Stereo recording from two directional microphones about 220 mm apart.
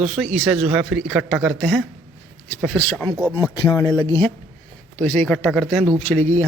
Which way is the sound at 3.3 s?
20° left (ahead or behind).